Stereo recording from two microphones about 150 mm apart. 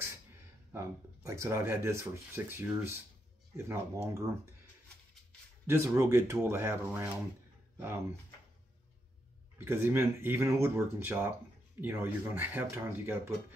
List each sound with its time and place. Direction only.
0.7 s speech: 20° right (ahead or behind)
5.7 s speech: 20° right (ahead or behind)
7.7 s a sound: 15° right (ahead or behind)
9.7 s speech: 15° right (ahead or behind)